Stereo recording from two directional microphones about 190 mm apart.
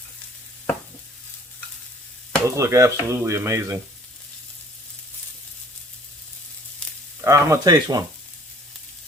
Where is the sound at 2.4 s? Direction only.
15° right (ahead or behind).